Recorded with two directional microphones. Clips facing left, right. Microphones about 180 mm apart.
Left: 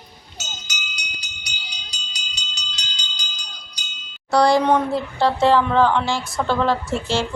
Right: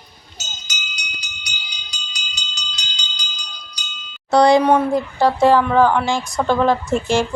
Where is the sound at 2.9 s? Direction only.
45° left (ahead or behind).